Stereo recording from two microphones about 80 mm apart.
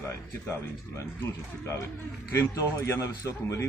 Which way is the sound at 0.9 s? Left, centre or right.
Left.